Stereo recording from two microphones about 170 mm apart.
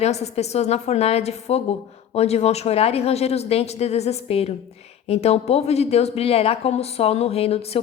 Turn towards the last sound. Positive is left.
turn(degrees=35)  # may be behind; listen again after turning